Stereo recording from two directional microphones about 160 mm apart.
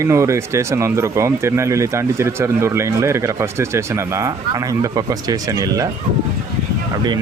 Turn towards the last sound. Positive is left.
turn(degrees=-20)  # may be behind; listen again after turning